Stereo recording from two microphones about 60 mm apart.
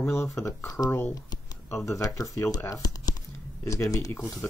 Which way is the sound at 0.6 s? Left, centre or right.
Left.